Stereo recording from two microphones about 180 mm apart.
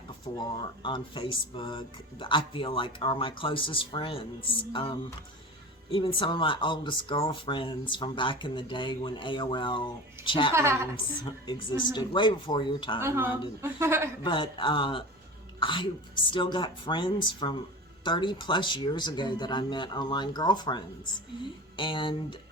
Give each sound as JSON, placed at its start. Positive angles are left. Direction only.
{"t": 0.3, "sound": "speech", "side_deg": 25}
{"t": 10.5, "sound": "a woman's voice", "side_deg": -15}
{"t": 11.8, "sound": "speech", "side_deg": 25}
{"t": 13.0, "sound": "a woman's voice", "side_deg": -15}
{"t": 14.3, "sound": "speech", "side_deg": 25}